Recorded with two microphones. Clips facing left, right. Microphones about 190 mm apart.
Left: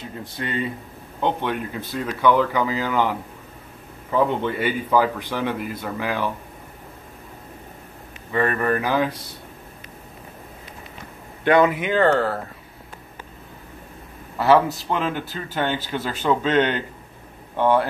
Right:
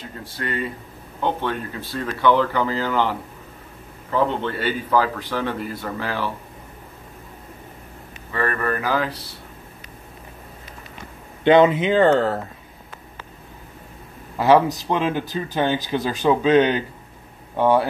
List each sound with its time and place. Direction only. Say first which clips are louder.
0.2 s speech: even; 20° left (ahead or behind)
8.3 s speech: left 2 dB; 15° left (ahead or behind)
11.4 s speech: right 3 dB; 25° right (ahead or behind)
14.4 s speech: right 1 dB; 15° right (ahead or behind)